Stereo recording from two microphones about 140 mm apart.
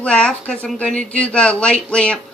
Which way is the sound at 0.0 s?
5° left (ahead or behind).